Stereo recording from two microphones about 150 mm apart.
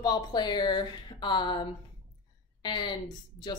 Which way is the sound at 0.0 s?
25° left (ahead or behind).